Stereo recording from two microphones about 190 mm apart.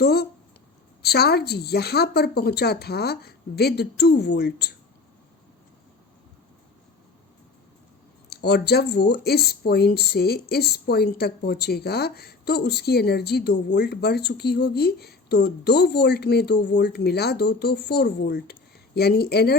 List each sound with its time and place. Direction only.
0.0 s speech: 55° left (ahead or behind)
8.3 s speech: 55° left (ahead or behind)